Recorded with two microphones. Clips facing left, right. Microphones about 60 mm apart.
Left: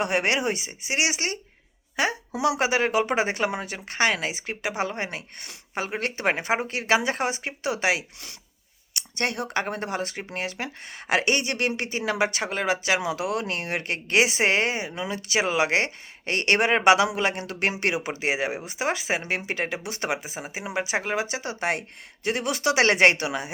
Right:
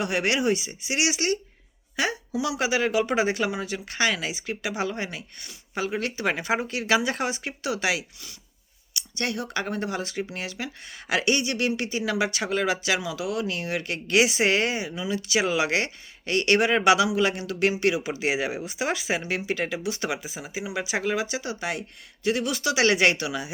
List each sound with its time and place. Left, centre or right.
0.0 s speech: left
2.3 s speech: left
2.6 s speech: left
8.9 s speech: left
13.0 s speech: left
18.1 s speech: left